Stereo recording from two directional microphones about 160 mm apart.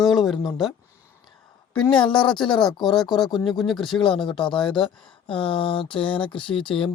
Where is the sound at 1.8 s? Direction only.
5° left (ahead or behind).